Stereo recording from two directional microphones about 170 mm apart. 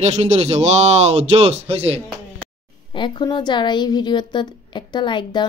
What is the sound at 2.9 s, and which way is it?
A woman's voice, 30° left (ahead or behind).